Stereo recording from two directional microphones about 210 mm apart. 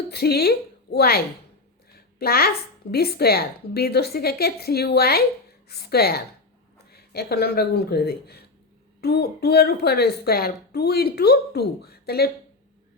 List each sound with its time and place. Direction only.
0.1 s a woman's voice: 50° left (ahead or behind)